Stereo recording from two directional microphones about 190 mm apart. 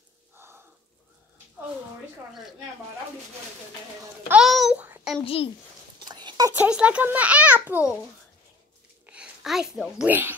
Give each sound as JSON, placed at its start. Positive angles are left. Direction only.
{"t": 0.4, "sound": "a sound", "side_deg": -10}
{"t": 4.3, "sound": "a child's voice", "side_deg": 0}
{"t": 5.2, "sound": "a child's voice", "side_deg": 30}
{"t": 6.0, "sound": "a sound", "side_deg": -20}
{"t": 6.6, "sound": "a child's voice", "side_deg": -5}
{"t": 9.0, "sound": "speech", "side_deg": -5}